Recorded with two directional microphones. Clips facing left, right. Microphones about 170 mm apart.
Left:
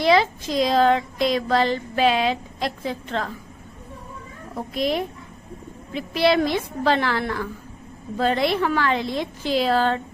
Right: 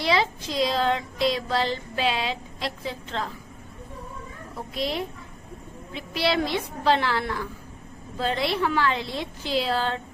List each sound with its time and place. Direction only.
0.0 s speech: 50° left (ahead or behind)
4.8 s speech: 50° left (ahead or behind)